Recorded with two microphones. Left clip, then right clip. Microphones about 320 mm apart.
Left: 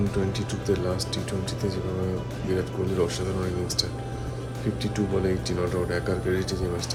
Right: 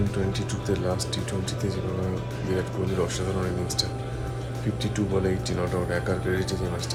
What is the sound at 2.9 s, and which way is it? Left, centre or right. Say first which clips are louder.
Speech: left 1 dB; centre.